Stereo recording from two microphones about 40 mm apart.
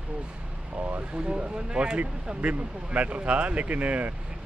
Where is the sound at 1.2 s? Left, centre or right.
Right.